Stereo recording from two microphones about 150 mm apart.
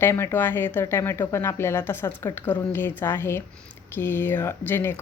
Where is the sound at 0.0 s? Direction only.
15° left (ahead or behind).